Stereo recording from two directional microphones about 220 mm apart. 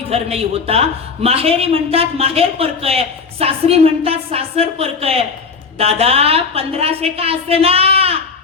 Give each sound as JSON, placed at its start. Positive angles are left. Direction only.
{"t": 0.1, "sound": "a man's voice", "side_deg": -25}